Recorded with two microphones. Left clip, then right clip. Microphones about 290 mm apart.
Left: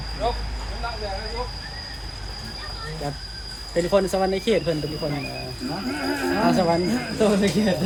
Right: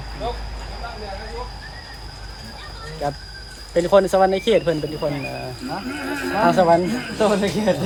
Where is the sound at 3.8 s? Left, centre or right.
Centre.